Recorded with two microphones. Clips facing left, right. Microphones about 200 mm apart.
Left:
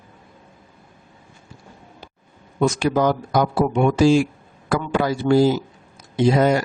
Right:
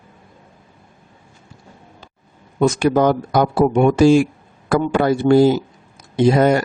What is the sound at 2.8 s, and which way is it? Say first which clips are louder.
Speech: right 4 dB; 55° right (ahead or behind).